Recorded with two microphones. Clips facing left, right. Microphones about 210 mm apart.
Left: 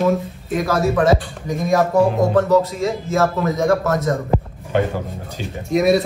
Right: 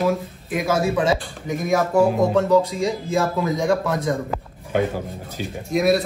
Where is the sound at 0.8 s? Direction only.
15° right (ahead or behind).